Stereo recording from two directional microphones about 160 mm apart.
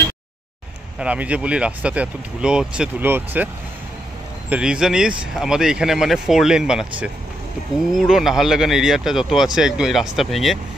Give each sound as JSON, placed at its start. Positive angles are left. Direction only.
{"t": 0.9, "sound": "speech", "side_deg": -10}
{"t": 4.5, "sound": "speech", "side_deg": -5}